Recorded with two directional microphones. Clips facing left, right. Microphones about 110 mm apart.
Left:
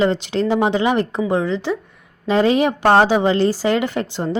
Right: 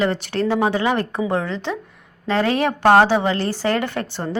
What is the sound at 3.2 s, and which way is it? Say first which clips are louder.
Speech: left 5 dB; 25° left (ahead or behind).